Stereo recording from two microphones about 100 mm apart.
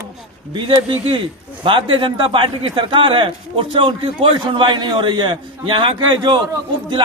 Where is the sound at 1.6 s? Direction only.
55° right (ahead or behind).